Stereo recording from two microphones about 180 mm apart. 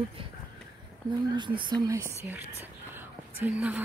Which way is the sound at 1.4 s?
25° right (ahead or behind).